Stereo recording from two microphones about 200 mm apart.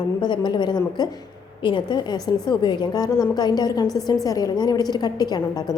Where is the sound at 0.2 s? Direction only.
20° left (ahead or behind).